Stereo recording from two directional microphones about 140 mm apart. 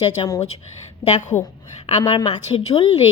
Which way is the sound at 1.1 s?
60° left (ahead or behind).